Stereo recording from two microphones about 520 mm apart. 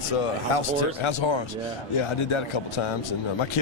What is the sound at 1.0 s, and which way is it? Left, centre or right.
Speech, left.